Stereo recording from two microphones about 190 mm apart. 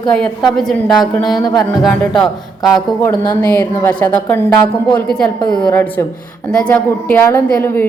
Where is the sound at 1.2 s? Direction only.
20° left (ahead or behind).